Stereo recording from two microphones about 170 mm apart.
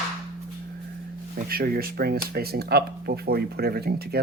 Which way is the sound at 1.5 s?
60° right (ahead or behind).